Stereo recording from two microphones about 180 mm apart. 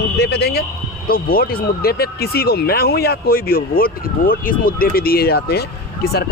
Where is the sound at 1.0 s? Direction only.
55° left (ahead or behind).